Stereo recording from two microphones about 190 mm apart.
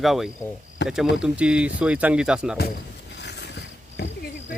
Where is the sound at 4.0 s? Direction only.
60° left (ahead or behind).